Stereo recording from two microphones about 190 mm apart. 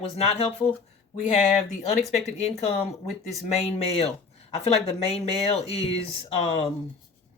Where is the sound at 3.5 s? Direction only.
35° left (ahead or behind).